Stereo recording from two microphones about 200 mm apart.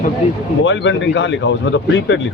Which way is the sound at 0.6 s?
65° left (ahead or behind).